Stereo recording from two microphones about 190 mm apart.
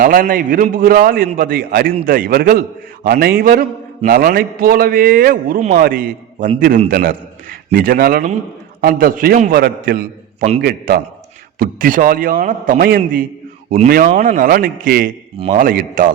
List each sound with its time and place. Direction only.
0.0 s a man's voice: 50° right (ahead or behind)
5.5 s a man's voice: 35° right (ahead or behind)
5.8 s a man's voice: 50° right (ahead or behind)